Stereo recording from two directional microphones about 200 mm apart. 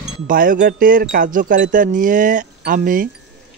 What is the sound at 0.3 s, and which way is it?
Speech, 45° right (ahead or behind).